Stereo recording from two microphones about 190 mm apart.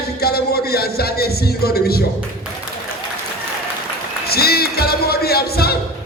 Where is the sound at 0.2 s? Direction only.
55° left (ahead or behind).